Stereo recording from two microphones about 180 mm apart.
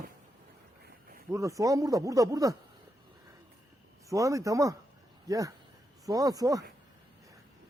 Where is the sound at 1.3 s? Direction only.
15° right (ahead or behind).